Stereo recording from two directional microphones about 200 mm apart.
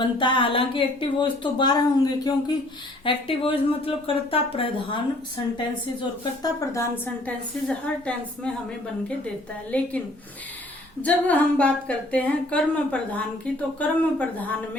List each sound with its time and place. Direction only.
0.0 s speech: 25° left (ahead or behind)
6.0 s speech: 20° left (ahead or behind)
6.9 s a woman's voice: 10° left (ahead or behind)
11.0 s a woman's voice: 5° left (ahead or behind)